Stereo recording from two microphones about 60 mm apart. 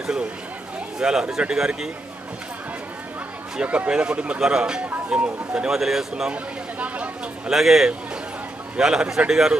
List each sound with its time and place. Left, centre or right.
0.9 s a man's voice: centre
3.6 s a man's voice: right
5.7 s a man's voice: centre
6.3 s speech: right
7.4 s a man's voice: centre